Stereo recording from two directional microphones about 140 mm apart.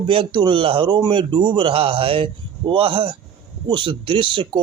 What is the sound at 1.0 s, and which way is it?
Speech, 30° right (ahead or behind).